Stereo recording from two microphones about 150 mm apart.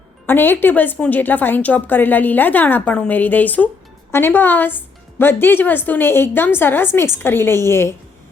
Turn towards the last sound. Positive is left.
turn(degrees=15)  # may be behind; listen again after turning